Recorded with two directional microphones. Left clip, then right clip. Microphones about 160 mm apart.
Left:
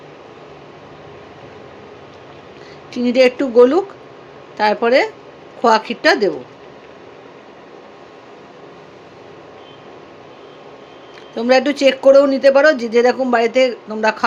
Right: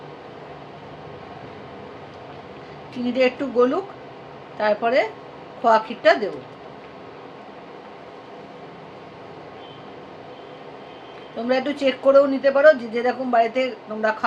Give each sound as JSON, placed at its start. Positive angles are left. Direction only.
{"t": 2.9, "sound": "speech", "side_deg": 70}
{"t": 11.4, "sound": "speech", "side_deg": 70}